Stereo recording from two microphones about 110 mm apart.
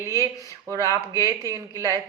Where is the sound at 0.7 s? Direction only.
25° left (ahead or behind).